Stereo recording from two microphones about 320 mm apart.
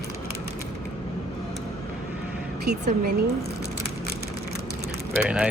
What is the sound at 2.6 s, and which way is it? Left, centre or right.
Speech, right.